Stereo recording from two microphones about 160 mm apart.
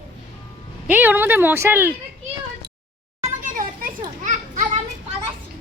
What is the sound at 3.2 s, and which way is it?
Children playing, 55° right (ahead or behind).